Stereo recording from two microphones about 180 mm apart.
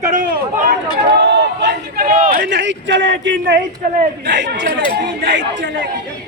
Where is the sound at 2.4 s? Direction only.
75° right (ahead or behind).